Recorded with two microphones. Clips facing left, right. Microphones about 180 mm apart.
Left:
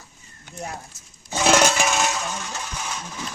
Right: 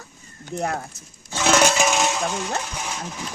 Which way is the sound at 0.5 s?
70° right (ahead or behind).